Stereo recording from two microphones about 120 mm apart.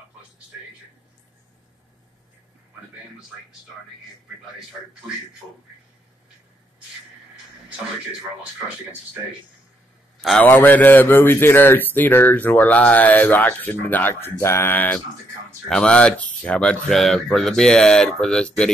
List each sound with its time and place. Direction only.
10.4 s speech: 15° left (ahead or behind)